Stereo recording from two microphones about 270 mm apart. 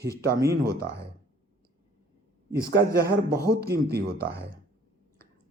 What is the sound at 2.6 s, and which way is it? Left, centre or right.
Speech, right.